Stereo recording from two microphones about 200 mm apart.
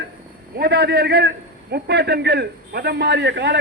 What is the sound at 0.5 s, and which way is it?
A man's voice, 55° right (ahead or behind).